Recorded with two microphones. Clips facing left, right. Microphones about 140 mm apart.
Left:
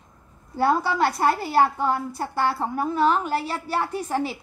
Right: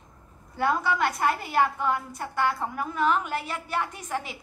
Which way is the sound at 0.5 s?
35° left (ahead or behind).